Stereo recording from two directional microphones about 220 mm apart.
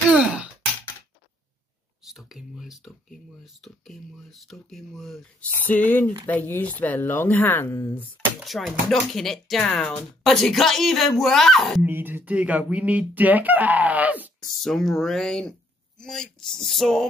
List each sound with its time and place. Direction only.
2.0 s speech: centre (ahead or behind)
11.9 s speech: 10° right (ahead or behind)